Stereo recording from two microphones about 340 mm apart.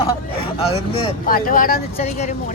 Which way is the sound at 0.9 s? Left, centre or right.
Left.